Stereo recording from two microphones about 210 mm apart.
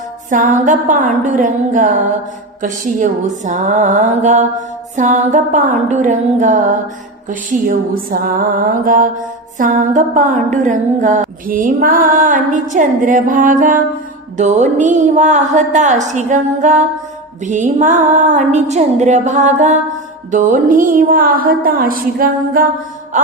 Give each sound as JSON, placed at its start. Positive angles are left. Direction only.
{"t": 0.3, "sound": "music", "side_deg": -35}